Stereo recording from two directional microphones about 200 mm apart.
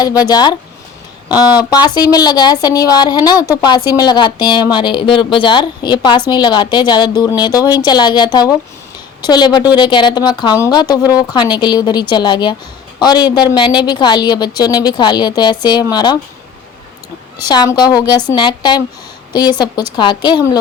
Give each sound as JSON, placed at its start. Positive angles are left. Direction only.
{"t": 0.0, "sound": "a woman's voice", "side_deg": 20}
{"t": 17.4, "sound": "a woman's voice", "side_deg": 20}